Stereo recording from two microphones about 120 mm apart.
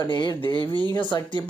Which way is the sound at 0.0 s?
35° left (ahead or behind).